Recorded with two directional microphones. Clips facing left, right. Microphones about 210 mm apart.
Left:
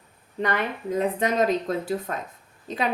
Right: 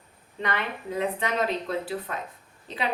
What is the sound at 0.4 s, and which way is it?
Speech, 45° left (ahead or behind).